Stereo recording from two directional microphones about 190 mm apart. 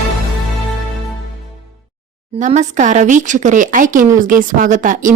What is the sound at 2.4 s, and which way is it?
Speech, 40° right (ahead or behind).